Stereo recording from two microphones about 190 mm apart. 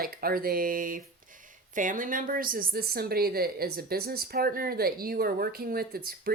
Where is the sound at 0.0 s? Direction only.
50° right (ahead or behind).